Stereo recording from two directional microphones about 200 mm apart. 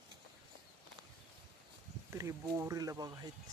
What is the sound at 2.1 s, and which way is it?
Speech, 15° right (ahead or behind).